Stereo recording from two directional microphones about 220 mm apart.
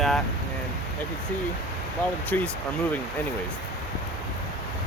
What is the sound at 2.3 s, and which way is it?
Speech, 10° left (ahead or behind).